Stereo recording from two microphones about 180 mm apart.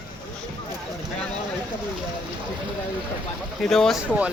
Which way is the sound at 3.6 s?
Centre (ahead or behind).